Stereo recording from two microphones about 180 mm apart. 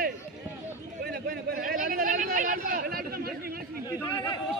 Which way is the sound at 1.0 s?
55° right (ahead or behind).